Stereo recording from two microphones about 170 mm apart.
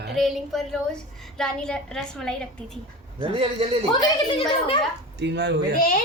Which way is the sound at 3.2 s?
30° right (ahead or behind).